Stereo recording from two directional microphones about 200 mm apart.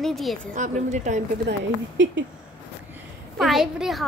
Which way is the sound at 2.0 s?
70° right (ahead or behind).